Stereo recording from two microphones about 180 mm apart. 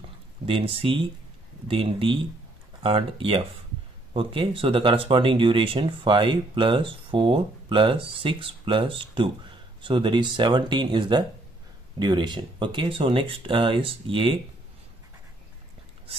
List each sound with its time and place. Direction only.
0.5 s speech: 30° right (ahead or behind)